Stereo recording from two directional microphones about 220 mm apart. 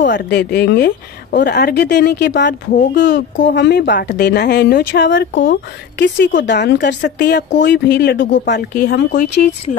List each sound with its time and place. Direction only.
0.0 s a woman's voice: 50° left (ahead or behind)